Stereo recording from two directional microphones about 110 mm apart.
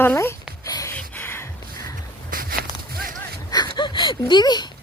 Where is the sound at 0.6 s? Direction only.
30° left (ahead or behind).